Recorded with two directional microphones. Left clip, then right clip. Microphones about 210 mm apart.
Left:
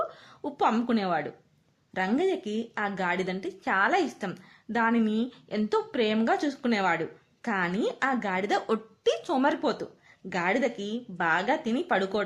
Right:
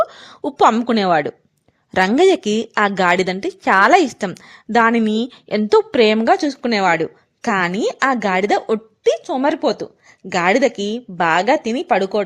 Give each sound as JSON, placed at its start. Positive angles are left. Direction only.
{"t": 0.1, "sound": "a woman's voice", "side_deg": -45}